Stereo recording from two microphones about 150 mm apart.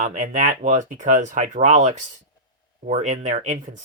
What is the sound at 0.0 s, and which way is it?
Speech, 50° right (ahead or behind).